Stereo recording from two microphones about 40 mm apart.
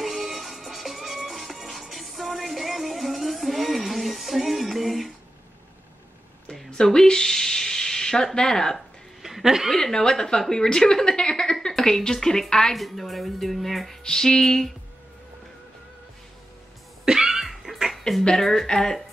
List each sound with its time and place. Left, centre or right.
0.0 s music: centre
6.7 s a sound: centre
8.4 s a woman's voice: centre
9.2 s chuckle: centre
9.7 s a woman's voice: centre
12.7 s speech: centre
14.0 s a woman's voice: centre
17.0 s cough: centre
18.2 s a woman's voice: centre